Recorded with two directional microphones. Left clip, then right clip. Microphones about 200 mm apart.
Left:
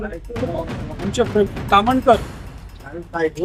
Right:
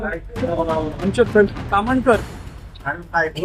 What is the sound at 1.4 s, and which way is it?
Speech, 25° left (ahead or behind).